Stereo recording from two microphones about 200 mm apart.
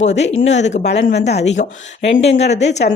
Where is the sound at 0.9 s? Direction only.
60° left (ahead or behind).